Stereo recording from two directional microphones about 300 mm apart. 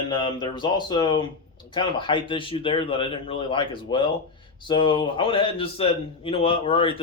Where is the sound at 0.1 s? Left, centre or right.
Centre.